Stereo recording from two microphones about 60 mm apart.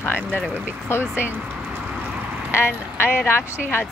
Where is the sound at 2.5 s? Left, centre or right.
Left.